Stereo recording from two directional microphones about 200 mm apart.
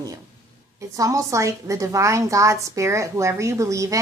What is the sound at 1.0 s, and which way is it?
A woman's voice, 15° right (ahead or behind).